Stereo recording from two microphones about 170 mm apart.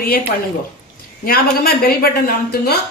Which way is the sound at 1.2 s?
60° left (ahead or behind).